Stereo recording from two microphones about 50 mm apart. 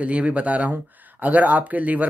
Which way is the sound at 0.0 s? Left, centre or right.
Right.